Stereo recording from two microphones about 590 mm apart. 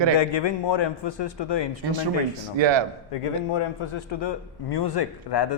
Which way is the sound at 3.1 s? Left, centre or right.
Left.